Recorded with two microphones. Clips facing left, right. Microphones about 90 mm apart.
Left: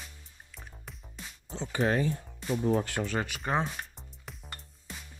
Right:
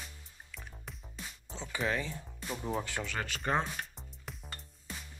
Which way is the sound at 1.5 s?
50° left (ahead or behind).